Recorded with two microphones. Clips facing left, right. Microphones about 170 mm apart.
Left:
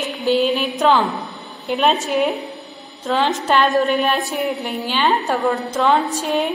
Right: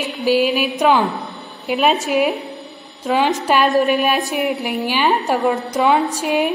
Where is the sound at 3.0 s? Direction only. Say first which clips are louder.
Right 2 dB; 10° right (ahead or behind).